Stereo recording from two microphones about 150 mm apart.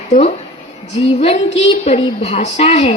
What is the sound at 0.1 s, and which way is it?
Speech, 50° left (ahead or behind).